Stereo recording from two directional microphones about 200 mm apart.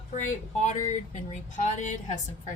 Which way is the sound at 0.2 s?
35° left (ahead or behind).